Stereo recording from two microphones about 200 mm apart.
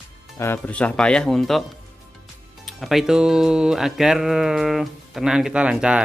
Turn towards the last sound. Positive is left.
turn(degrees=-5)  # may be behind; listen again after turning